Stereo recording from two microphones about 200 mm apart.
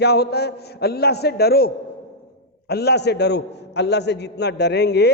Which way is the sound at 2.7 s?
55° left (ahead or behind).